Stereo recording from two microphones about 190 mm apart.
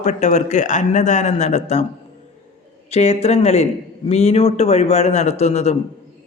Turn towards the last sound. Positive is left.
turn(degrees=35)  # may be behind; listen again after turning